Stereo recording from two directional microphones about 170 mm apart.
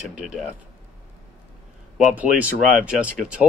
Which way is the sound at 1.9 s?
10° right (ahead or behind).